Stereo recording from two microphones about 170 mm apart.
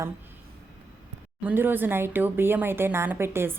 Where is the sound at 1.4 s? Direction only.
10° right (ahead or behind).